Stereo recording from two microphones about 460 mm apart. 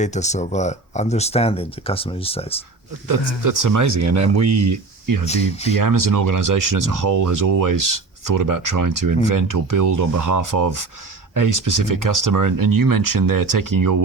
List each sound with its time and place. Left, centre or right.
0.0 s speech: centre
3.4 s speech: right
5.2 s speech: centre
5.7 s speech: right